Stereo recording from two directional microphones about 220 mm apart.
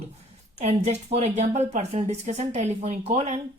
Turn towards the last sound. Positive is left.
turn(degrees=-30)  # may be behind; listen again after turning